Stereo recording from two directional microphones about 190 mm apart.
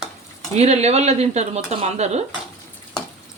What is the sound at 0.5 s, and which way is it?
Speech, 35° right (ahead or behind).